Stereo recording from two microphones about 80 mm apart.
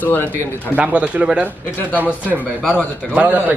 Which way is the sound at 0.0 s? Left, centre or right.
Left.